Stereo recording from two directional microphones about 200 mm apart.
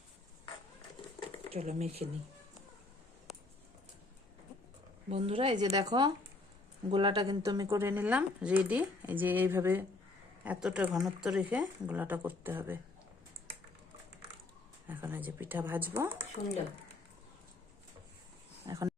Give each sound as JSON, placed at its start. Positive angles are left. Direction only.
{"t": 1.5, "sound": "speech", "side_deg": -30}
{"t": 5.0, "sound": "speech", "side_deg": -30}
{"t": 14.8, "sound": "speech", "side_deg": -10}
{"t": 18.6, "sound": "a sound", "side_deg": -15}